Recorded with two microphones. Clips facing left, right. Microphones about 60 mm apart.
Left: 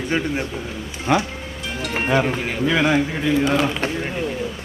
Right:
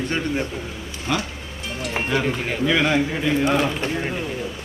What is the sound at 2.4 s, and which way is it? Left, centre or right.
Speech, centre.